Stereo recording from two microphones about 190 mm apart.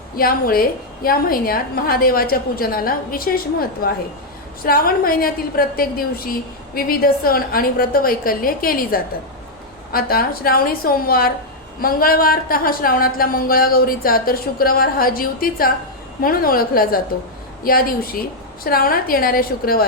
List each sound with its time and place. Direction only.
0.2 s speech: 50° left (ahead or behind)